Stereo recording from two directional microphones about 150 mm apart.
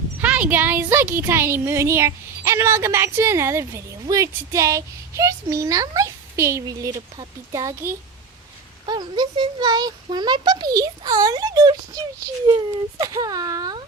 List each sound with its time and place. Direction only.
0.2 s a child's voice: 10° right (ahead or behind); by 13.8 s 25° right (ahead or behind)